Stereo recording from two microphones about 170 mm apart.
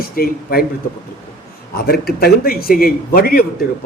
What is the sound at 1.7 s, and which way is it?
A man's voice, 65° left (ahead or behind).